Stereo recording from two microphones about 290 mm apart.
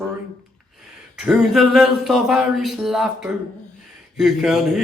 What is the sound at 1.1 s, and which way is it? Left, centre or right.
Speech, centre.